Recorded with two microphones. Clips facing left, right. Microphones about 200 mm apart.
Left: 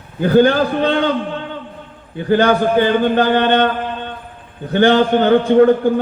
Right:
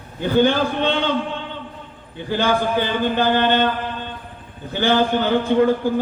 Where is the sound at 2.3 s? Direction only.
55° left (ahead or behind).